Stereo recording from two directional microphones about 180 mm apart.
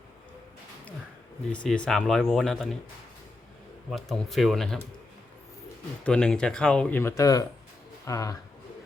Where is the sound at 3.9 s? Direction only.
Centre (ahead or behind).